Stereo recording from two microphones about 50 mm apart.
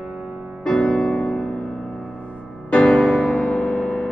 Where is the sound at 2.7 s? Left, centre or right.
Centre.